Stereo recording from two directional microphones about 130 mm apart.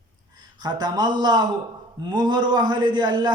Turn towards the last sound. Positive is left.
turn(degrees=-35)  # may be behind; listen again after turning